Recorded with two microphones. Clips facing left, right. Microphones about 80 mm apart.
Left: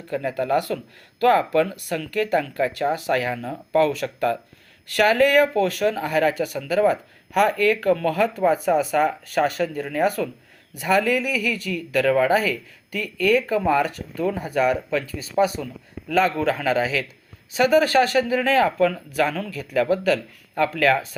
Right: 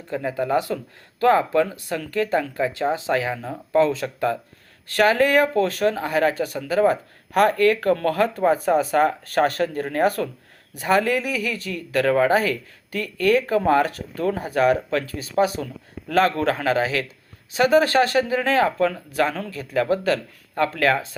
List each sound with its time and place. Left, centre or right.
0.1 s speech: centre; by 10.2 s right
10.8 s speech: right
13.7 s speech: right
17.5 s speech: right